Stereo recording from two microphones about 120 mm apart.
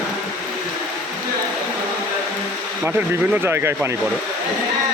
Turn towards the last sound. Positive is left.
turn(degrees=-20)  # may be behind; listen again after turning